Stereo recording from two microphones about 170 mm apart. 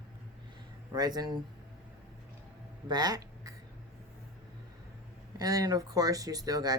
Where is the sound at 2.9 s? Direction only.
25° right (ahead or behind).